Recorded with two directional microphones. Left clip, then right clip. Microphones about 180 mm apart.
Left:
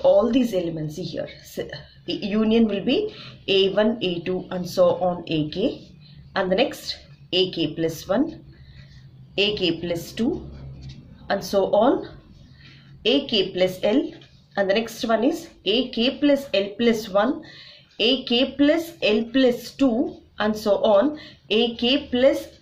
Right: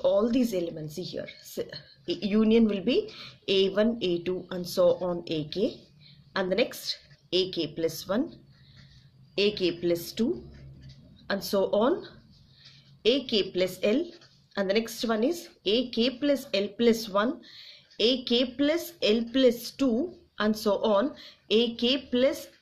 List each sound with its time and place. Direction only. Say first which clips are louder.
0.0 s speech: left 7 dB; 35° right (ahead or behind)
9.3 s speech: left 5 dB; 35° right (ahead or behind)
11.2 s speech: left 6 dB; 40° right (ahead or behind)